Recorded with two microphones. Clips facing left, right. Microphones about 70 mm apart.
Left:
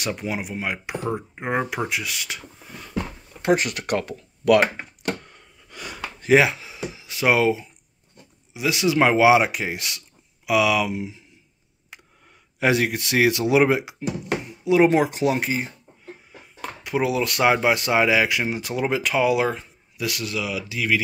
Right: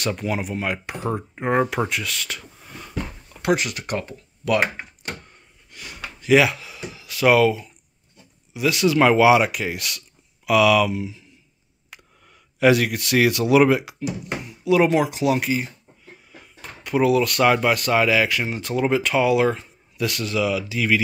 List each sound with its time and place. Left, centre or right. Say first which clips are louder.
0.0 s speech: right 3 dB; centre
3.5 s speech: left 2 dB; left
6.2 s speech: even; left
12.5 s speech: right 3 dB; left
16.8 s speech: right 4 dB; centre